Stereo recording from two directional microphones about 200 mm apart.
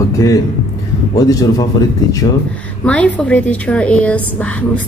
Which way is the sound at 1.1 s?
20° left (ahead or behind).